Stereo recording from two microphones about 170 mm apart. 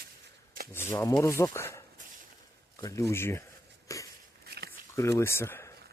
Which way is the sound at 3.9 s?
20° left (ahead or behind).